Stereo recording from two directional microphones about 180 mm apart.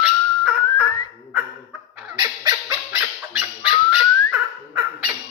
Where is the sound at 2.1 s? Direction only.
20° right (ahead or behind).